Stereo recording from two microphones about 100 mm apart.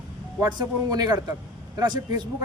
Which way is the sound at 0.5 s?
40° right (ahead or behind).